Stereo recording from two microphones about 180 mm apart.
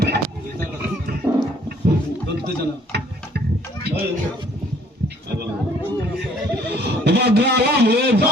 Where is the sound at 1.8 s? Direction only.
60° right (ahead or behind).